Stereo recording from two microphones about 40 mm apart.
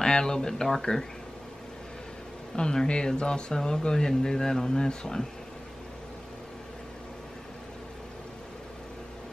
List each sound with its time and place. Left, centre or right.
0.0 s speech: centre
2.5 s speech: centre